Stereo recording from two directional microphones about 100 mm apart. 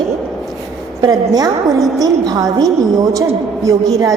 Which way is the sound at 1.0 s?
40° right (ahead or behind).